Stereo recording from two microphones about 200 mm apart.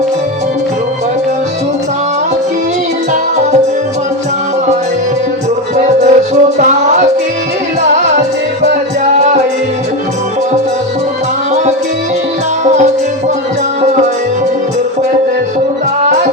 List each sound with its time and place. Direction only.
5.7 s music: 35° right (ahead or behind)